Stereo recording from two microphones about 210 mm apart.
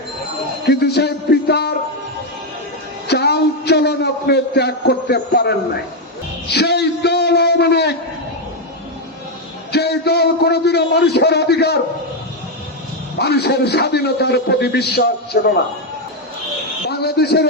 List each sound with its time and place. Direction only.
0.7 s music: 50° left (ahead or behind)
3.1 s a man's voice: 50° left (ahead or behind)
9.7 s a man's voice: 50° left (ahead or behind)
13.1 s a man's voice: 50° left (ahead or behind)
16.9 s a sound: 50° left (ahead or behind)